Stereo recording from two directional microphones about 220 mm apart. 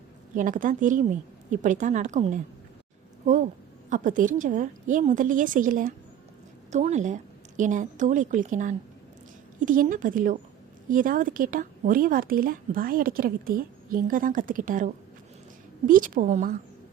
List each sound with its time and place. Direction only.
0.3 s speech: 35° right (ahead or behind)
3.8 s a woman's voice: 35° right (ahead or behind)